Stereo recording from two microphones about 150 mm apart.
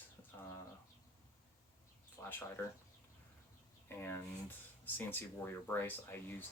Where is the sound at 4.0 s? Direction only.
15° left (ahead or behind).